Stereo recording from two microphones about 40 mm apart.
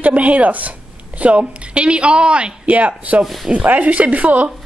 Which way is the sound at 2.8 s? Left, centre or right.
Right.